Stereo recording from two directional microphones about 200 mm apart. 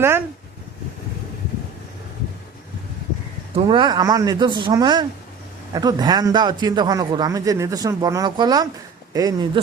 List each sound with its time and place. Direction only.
3.5 s a man's voice: 25° right (ahead or behind)